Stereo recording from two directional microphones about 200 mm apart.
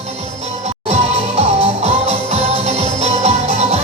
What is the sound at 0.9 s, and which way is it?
Music, 30° right (ahead or behind).